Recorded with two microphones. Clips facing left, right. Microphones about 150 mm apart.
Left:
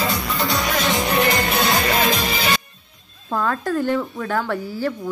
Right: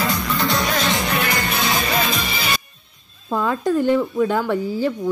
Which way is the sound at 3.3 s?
15° right (ahead or behind).